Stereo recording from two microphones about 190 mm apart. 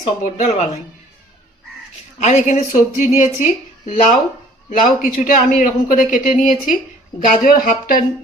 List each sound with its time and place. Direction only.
0.2 s a woman's voice: 40° left (ahead or behind)
2.1 s a woman's voice: 40° left (ahead or behind)